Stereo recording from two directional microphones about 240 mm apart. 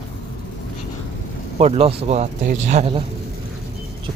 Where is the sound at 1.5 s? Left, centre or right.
Right.